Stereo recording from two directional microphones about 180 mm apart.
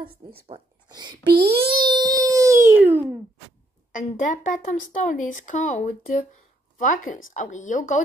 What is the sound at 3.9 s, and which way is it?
Speech, 45° left (ahead or behind).